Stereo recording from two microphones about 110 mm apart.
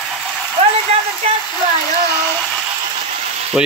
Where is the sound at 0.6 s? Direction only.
60° right (ahead or behind).